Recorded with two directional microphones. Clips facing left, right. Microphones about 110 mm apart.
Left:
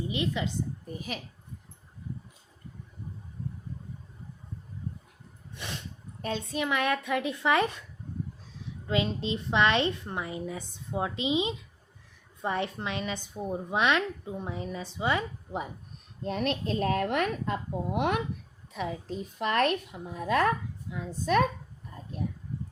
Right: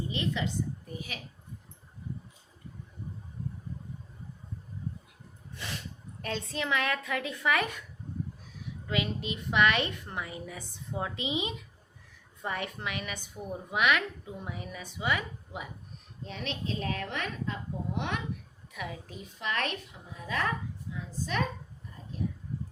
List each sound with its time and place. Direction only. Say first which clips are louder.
0.1 s a woman's voice: left 2 dB; 20° left (ahead or behind)
5.5 s snort: left 1 dB; 20° left (ahead or behind)
6.2 s a woman's voice: left 3 dB; 15° left (ahead or behind)
16.2 s a woman's voice: left 7 dB; 50° left (ahead or behind)
18.7 s a woman's voice: left 6 dB; 25° left (ahead or behind)
19.4 s a woman's voice: left 7 dB; 45° left (ahead or behind)